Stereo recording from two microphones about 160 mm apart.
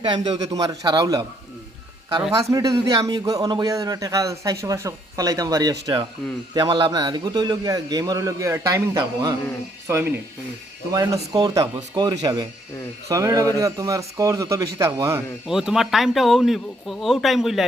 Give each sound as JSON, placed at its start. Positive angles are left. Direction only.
{"t": 0.0, "sound": "a man's voice", "side_deg": -30}
{"t": 2.3, "sound": "a man's voice", "side_deg": -20}
{"t": 9.8, "sound": "a man's voice", "side_deg": -15}
{"t": 15.4, "sound": "a man's voice", "side_deg": -5}